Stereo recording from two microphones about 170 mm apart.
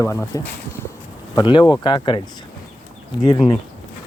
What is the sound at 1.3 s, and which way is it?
Speech, 25° left (ahead or behind).